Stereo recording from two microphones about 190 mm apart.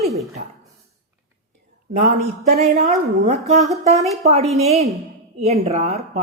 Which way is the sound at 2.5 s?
35° right (ahead or behind).